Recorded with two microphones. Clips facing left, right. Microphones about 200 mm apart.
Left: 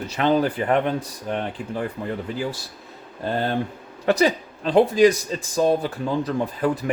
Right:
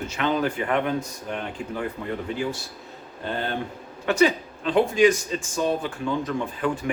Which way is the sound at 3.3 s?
40° left (ahead or behind).